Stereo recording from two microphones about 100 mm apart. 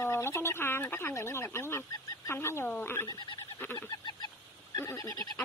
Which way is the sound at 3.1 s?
45° left (ahead or behind).